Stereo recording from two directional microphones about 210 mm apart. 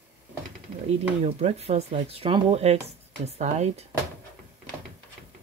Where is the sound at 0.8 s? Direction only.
30° right (ahead or behind).